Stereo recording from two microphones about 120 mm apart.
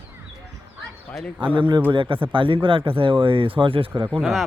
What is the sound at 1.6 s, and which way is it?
A man's voice, 40° right (ahead or behind).